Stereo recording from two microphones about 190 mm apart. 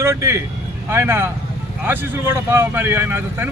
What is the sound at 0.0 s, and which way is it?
Speech, 15° right (ahead or behind).